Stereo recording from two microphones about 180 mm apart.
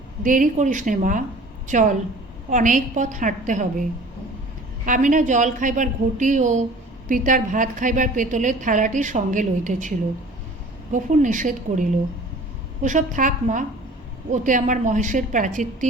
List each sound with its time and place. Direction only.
0.2 s a woman's voice: 45° right (ahead or behind)
4.9 s a woman's voice: 45° right (ahead or behind)
10.9 s a woman's voice: 45° right (ahead or behind)